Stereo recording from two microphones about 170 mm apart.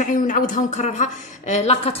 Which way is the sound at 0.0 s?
50° left (ahead or behind).